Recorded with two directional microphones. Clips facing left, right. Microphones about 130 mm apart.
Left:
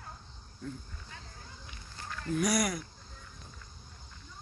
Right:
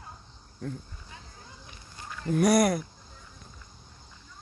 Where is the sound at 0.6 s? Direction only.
65° right (ahead or behind).